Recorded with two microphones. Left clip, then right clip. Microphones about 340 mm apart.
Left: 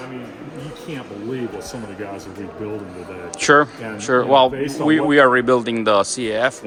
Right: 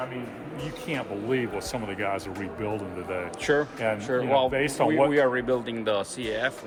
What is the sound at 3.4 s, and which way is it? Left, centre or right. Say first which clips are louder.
Speech: left 11 dB; centre.